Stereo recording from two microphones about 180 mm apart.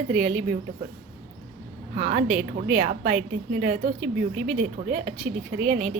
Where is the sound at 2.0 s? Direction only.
45° right (ahead or behind).